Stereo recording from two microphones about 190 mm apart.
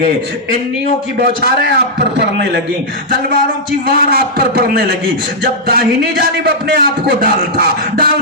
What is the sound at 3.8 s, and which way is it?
Speech, 55° right (ahead or behind).